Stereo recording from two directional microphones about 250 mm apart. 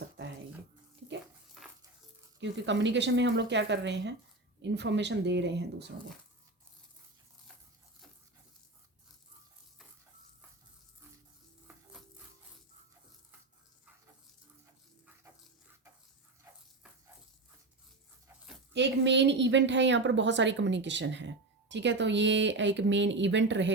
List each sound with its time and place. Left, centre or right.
1.6 s dog: centre
2.4 s a woman's voice: right
18.7 s a woman's voice: right